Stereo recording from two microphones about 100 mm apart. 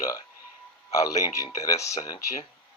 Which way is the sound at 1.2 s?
35° left (ahead or behind).